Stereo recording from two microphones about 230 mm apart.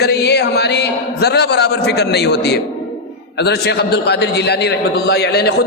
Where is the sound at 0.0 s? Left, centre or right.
Left.